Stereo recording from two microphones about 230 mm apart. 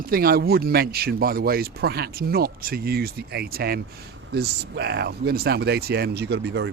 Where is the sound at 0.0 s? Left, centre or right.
Right.